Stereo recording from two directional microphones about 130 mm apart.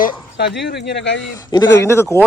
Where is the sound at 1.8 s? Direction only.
20° left (ahead or behind).